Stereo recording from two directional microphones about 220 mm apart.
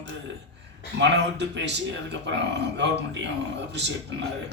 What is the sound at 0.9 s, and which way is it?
Speech, 55° right (ahead or behind).